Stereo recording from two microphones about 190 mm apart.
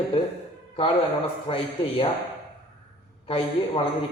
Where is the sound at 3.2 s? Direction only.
30° left (ahead or behind).